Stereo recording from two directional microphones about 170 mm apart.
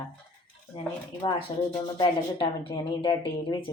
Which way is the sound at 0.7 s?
30° left (ahead or behind).